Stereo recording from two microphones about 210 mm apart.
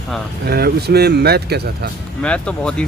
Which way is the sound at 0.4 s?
50° right (ahead or behind).